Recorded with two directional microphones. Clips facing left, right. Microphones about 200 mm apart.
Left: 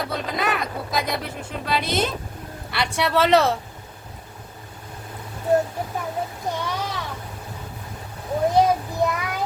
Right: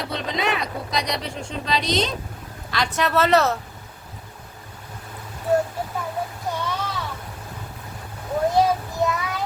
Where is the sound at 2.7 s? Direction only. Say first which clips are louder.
Even; 10° left (ahead or behind).